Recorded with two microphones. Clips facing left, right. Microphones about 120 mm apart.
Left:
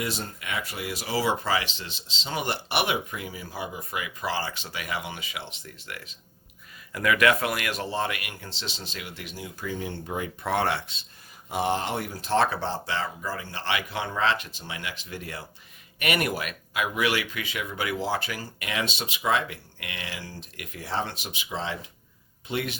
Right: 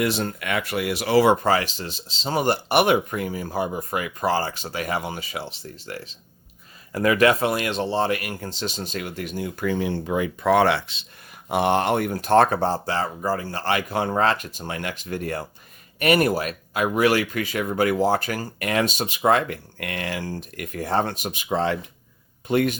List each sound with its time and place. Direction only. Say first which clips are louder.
0.0 s speech: right 8 dB; 70° right (ahead or behind); by 11.0 s 85° right
11.4 s speech: right 7 dB; 65° right (ahead or behind); by 15.4 s 50° right (ahead or behind)
16.0 s speech: right 8 dB; 35° right (ahead or behind)